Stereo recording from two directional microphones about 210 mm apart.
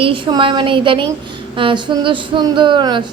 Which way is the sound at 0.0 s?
25° right (ahead or behind).